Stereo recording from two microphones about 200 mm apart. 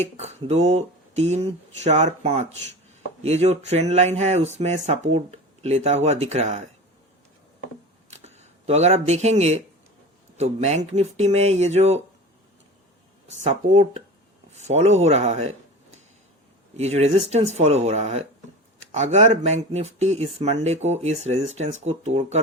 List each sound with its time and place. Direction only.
0.0 s speech: 35° right (ahead or behind)
8.1 s speech: 35° right (ahead or behind)
13.4 s speech: 35° right (ahead or behind)